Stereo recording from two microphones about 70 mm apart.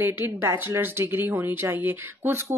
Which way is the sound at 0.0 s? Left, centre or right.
Right.